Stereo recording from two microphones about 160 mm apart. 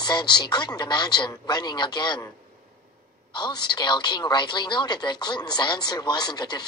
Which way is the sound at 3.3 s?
30° left (ahead or behind).